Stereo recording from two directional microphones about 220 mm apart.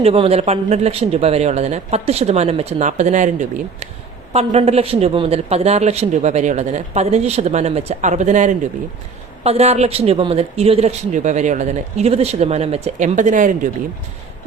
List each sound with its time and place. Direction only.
0.0 s a man's voice: 25° right (ahead or behind)